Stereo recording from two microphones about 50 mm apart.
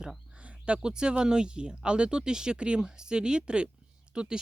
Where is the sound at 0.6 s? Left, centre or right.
Centre.